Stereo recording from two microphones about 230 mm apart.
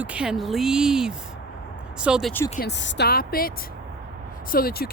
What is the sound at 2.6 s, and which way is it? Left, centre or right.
Speech, left.